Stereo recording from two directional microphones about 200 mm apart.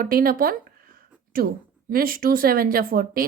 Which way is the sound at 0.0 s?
45° right (ahead or behind).